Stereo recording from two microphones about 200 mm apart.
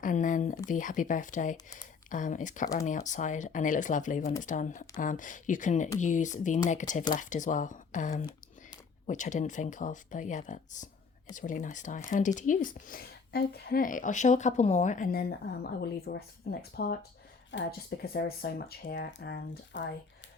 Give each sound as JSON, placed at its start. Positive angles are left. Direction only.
{"t": 0.0, "sound": "a woman's voice", "side_deg": 40}